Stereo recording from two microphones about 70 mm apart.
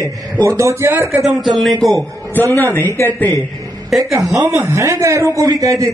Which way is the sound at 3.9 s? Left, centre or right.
Centre.